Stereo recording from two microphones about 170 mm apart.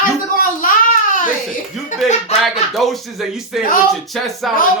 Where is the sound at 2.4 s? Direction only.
Centre (ahead or behind).